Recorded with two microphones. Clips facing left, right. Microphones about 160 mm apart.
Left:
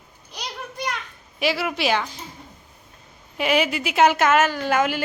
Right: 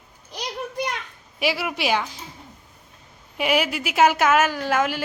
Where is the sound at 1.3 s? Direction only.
10° right (ahead or behind).